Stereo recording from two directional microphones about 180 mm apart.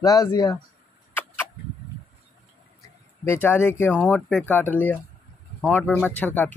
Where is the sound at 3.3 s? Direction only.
10° left (ahead or behind).